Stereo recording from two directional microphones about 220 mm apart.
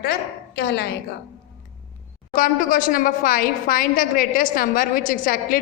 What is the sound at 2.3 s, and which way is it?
A woman's voice, 40° left (ahead or behind).